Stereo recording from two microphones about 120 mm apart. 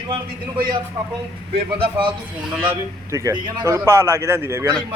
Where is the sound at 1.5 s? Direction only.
45° right (ahead or behind).